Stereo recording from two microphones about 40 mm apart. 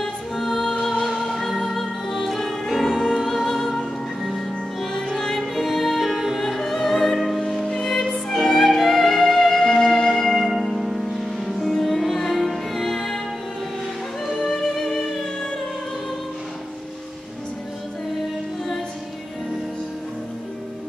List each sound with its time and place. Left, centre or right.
0.0 s music: centre
7.6 s music: centre
7.9 s music: centre
14.2 s music: centre